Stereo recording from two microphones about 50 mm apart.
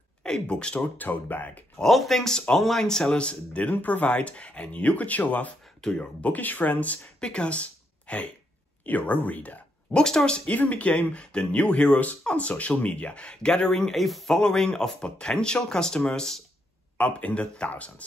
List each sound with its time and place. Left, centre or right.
0.2 s speech: centre
0.9 s speech: left
1.8 s speech: centre; by 5.5 s left
5.8 s speech: centre
6.2 s speech: left
7.2 s speech: centre
9.9 s speech: centre
10.5 s speech: left; by 16.4 s centre
17.0 s speech: left